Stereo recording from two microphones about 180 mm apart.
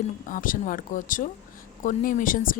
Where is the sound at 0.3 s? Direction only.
50° left (ahead or behind).